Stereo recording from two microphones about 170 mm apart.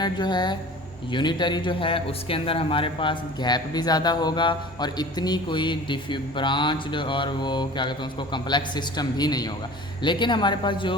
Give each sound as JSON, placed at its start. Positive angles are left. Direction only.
{"t": 0.0, "sound": "a man's voice", "side_deg": 25}